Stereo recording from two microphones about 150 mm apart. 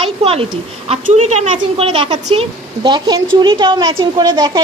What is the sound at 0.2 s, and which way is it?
A woman's voice, 40° right (ahead or behind).